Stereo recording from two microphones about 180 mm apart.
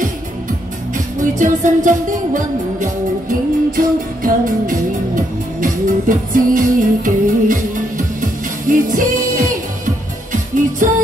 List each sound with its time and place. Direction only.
0.9 s music: 45° right (ahead or behind)